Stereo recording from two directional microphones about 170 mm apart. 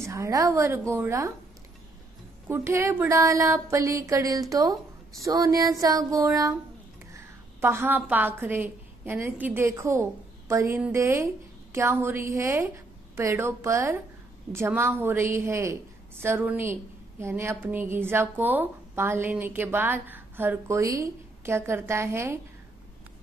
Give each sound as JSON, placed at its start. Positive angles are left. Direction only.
{"t": 0.0, "sound": "speech", "side_deg": -15}
{"t": 2.4, "sound": "a woman's voice", "side_deg": -15}